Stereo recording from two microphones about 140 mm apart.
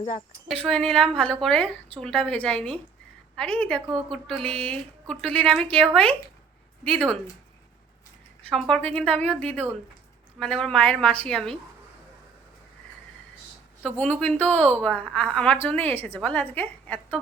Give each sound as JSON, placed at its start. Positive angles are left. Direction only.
{"t": 0.6, "sound": "a woman's voice", "side_deg": 5}
{"t": 8.4, "sound": "a woman's voice", "side_deg": 5}
{"t": 13.8, "sound": "a woman's voice", "side_deg": 10}